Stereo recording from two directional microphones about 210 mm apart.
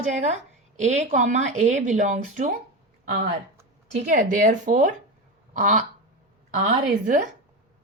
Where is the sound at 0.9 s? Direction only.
35° right (ahead or behind).